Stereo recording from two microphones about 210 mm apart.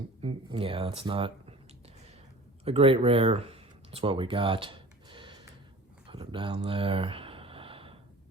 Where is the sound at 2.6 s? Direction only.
30° right (ahead or behind).